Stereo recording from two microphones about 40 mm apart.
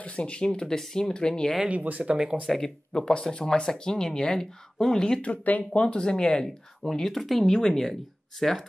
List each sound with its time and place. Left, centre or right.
0.0 s speech: left
0.7 s speech: centre
1.7 s speech: right
2.4 s speech: centre
5.2 s speech: left
5.8 s speech: left
6.8 s speech: centre